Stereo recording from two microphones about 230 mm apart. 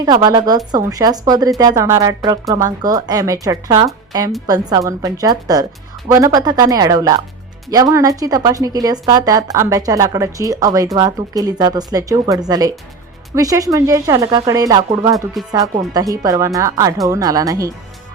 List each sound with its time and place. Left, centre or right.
0.0 s speech: centre
15.4 s speech: centre
15.9 s speech: centre